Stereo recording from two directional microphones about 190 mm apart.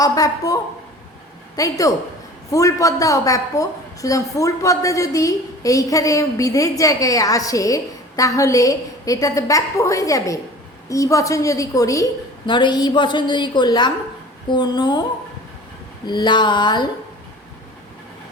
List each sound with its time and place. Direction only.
0.0 s a woman's voice: 20° left (ahead or behind)
16.0 s a woman's voice: 25° left (ahead or behind)